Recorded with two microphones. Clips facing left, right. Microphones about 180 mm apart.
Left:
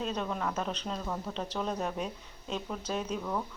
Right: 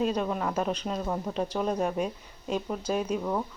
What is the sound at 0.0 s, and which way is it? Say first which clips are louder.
Speech: right 6 dB; 10° right (ahead or behind).